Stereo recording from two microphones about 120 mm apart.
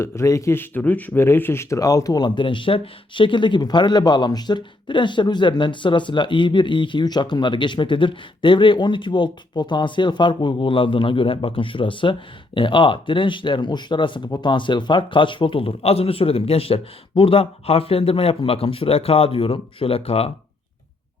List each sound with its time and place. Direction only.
0.0 s a man's voice: 25° left (ahead or behind); by 20.3 s 55° left (ahead or behind)